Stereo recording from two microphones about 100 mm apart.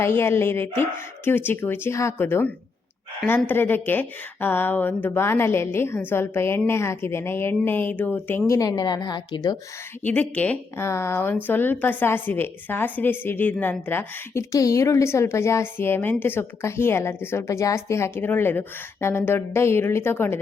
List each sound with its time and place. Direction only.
0.0 s a woman's voice: 25° left (ahead or behind)
8.4 s speech: 35° left (ahead or behind)
10.0 s speech: 15° left (ahead or behind)
10.8 s a woman's voice: 25° left (ahead or behind)
14.5 s a woman's voice: 35° left (ahead or behind)